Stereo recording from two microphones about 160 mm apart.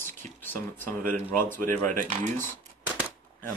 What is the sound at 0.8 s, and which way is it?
Speech, 55° right (ahead or behind).